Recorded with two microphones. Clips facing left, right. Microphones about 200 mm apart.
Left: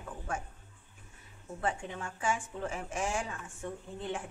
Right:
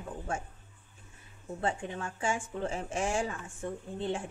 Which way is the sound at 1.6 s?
25° right (ahead or behind).